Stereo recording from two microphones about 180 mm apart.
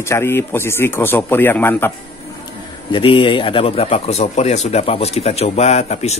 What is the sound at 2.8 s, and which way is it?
Speech, 30° left (ahead or behind).